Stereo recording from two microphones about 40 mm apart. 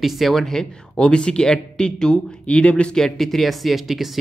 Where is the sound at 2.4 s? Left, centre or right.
Left.